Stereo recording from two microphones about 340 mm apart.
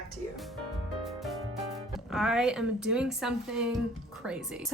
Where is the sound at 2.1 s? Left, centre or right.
Centre.